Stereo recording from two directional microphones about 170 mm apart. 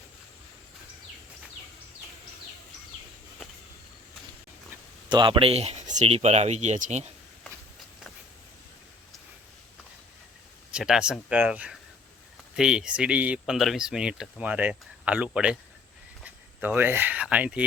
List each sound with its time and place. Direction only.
5.0 s speech: 25° right (ahead or behind); by 7.1 s 45° right (ahead or behind)
10.7 s speech: 5° right (ahead or behind)